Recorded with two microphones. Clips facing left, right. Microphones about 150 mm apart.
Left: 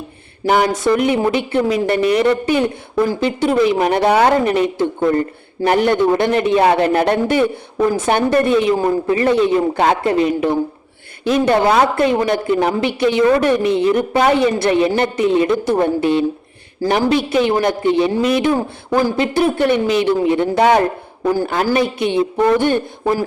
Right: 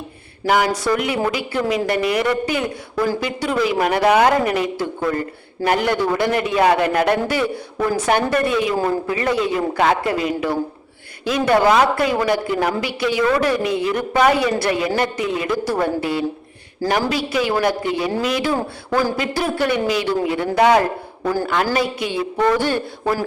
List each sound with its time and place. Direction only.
0.4 s speech: 30° left (ahead or behind)
11.9 s speech: 25° left (ahead or behind)
21.4 s a man's voice: 35° left (ahead or behind)
21.8 s speech: 25° left (ahead or behind)